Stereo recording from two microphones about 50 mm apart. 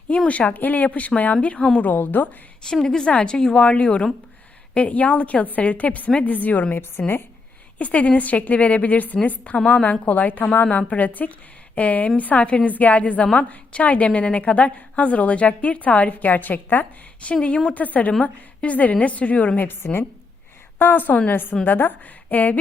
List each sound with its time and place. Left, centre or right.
0.3 s a woman's voice: left
2.6 s a woman's voice: centre; by 19.6 s left
19.6 s a woman's voice: left
20.7 s a woman's voice: left